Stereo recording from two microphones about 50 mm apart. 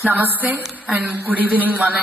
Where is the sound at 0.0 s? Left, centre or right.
Right.